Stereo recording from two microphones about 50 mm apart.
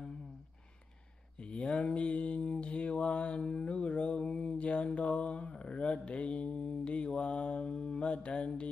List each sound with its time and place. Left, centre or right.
1.4 s mantra: left